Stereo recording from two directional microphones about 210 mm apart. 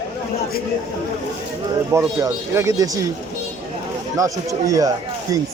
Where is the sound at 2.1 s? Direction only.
15° right (ahead or behind).